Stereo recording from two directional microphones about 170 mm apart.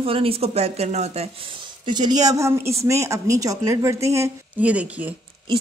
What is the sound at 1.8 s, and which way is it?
A woman's voice, 25° right (ahead or behind).